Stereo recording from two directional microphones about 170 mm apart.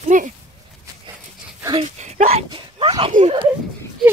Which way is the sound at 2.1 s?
35° right (ahead or behind).